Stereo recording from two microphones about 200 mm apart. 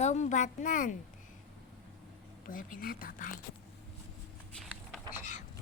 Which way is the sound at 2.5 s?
45° left (ahead or behind).